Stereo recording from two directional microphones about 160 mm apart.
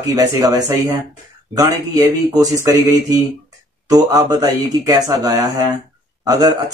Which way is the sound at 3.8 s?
25° right (ahead or behind).